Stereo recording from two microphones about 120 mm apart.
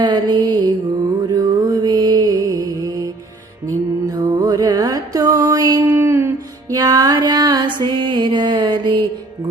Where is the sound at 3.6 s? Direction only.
30° right (ahead or behind).